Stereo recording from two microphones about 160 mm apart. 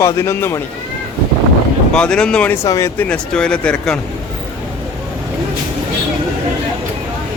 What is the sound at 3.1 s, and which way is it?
Speech, 5° left (ahead or behind).